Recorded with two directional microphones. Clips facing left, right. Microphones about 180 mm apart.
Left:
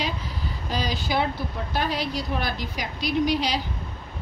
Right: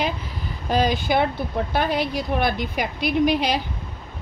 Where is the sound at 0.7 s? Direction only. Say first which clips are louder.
Right 8 dB; 55° right (ahead or behind).